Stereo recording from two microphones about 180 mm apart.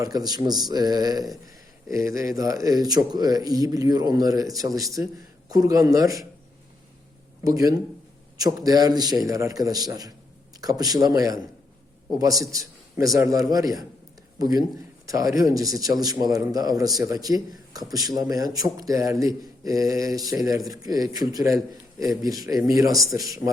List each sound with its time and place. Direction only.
0.0 s a man's voice: 20° right (ahead or behind)
7.4 s a man's voice: 20° right (ahead or behind)